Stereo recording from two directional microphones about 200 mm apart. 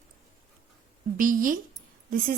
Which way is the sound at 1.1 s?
45° right (ahead or behind).